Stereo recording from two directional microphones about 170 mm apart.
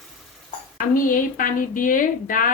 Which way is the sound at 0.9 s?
55° left (ahead or behind).